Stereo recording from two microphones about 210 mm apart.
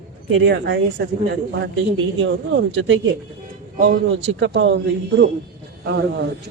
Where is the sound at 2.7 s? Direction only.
65° right (ahead or behind).